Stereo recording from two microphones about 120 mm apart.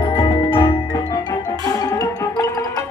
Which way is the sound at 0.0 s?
40° left (ahead or behind).